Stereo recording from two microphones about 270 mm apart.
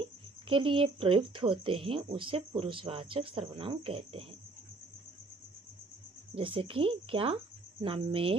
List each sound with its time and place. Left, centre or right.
0.0 s speech: centre
6.3 s speech: centre